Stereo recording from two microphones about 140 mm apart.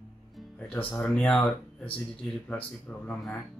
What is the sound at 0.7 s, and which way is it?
Speech, 10° left (ahead or behind).